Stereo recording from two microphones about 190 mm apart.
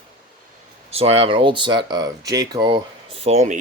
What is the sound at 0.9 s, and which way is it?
Speech, 30° right (ahead or behind).